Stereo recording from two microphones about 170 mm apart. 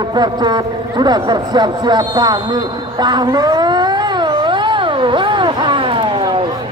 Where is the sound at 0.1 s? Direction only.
25° right (ahead or behind).